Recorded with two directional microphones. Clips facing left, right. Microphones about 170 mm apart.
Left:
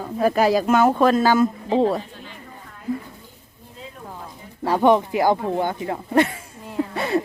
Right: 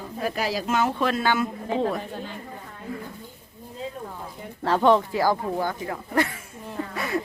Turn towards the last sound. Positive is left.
turn(degrees=30)  # may be behind; listen again after turning